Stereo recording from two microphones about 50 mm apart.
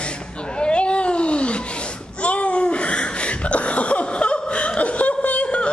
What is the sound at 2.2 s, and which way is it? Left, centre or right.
Laughter, left.